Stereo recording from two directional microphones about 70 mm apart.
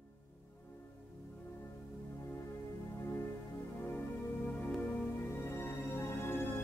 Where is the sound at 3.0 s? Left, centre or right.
Left.